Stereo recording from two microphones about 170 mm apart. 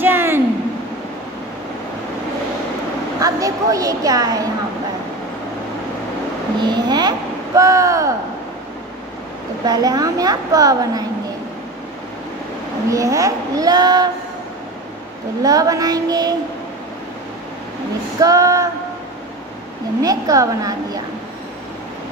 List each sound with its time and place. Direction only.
0.0 s a sound: 10° right (ahead or behind)
3.2 s a woman's voice: 20° right (ahead or behind)
6.6 s speech: 25° right (ahead or behind)
9.7 s speech: 20° right (ahead or behind)
12.9 s speech: 20° right (ahead or behind)
15.4 s speech: 20° right (ahead or behind)
18.2 s speech: 20° right (ahead or behind)
20.0 s speech: 20° right (ahead or behind)